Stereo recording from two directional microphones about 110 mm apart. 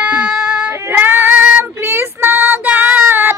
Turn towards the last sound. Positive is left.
turn(degrees=-20)  # may be behind; listen again after turning